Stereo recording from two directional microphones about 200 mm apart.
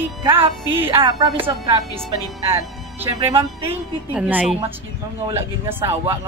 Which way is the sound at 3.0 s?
15° right (ahead or behind).